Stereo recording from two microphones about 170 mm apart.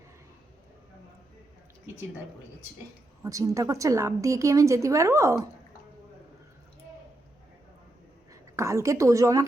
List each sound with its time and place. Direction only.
3.2 s a woman's voice: 20° right (ahead or behind)
8.3 s a woman's voice: 20° right (ahead or behind)